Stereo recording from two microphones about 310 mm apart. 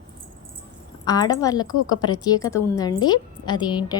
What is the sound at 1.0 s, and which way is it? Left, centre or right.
A woman's voice, centre.